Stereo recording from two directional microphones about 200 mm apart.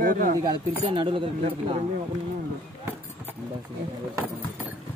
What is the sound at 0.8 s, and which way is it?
Speech, 25° right (ahead or behind).